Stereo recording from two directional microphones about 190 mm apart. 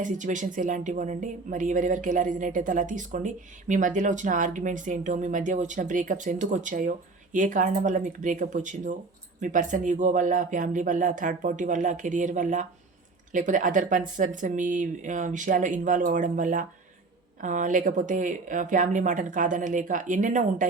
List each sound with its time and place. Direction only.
0.0 s speech: 40° right (ahead or behind)